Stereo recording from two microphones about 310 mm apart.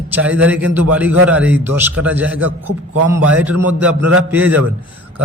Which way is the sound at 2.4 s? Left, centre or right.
Right.